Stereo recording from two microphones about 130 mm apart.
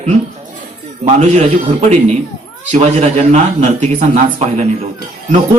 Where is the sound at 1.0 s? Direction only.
60° right (ahead or behind).